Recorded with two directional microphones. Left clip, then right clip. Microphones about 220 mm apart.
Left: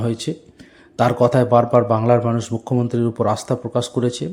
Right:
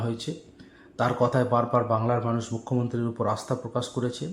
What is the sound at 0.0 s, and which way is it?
A man's voice, 30° left (ahead or behind).